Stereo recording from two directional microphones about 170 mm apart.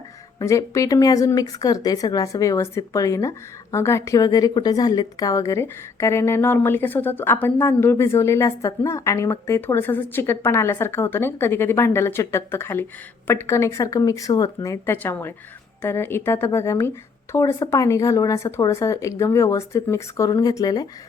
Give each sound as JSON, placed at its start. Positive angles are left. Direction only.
{"t": 0.3, "sound": "speech", "side_deg": 20}